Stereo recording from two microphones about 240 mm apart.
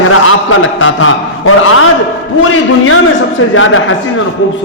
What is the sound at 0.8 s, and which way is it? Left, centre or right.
A man's voice, left.